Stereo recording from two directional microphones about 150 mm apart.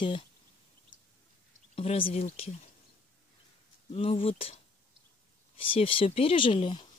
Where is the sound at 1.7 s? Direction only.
40° left (ahead or behind).